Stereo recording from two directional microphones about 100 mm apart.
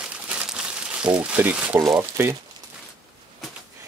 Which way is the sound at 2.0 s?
25° right (ahead or behind).